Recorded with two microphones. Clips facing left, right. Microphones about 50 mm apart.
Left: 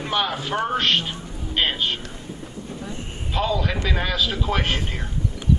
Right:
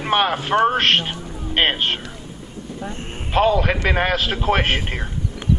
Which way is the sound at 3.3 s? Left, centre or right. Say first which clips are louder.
Right 7 dB; right.